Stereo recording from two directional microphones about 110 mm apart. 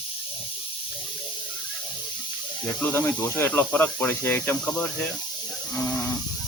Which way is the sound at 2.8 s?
20° left (ahead or behind).